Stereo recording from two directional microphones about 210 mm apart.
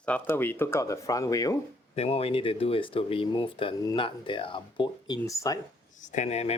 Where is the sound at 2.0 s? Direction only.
30° left (ahead or behind).